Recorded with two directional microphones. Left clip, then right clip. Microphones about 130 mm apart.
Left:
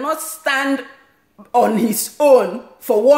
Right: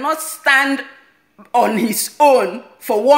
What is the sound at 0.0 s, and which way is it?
A woman's voice, 15° left (ahead or behind).